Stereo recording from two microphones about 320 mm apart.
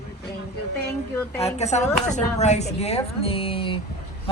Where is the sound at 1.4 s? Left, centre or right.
Left.